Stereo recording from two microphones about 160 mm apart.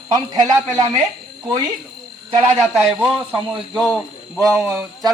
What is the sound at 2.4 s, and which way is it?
Speech, 20° right (ahead or behind).